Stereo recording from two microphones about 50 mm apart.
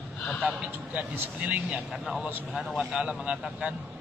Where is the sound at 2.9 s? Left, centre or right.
Right.